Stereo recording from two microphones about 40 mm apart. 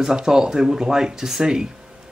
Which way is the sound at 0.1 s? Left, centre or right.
Centre.